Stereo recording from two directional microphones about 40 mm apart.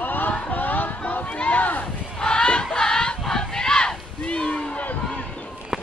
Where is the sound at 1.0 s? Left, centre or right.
Left.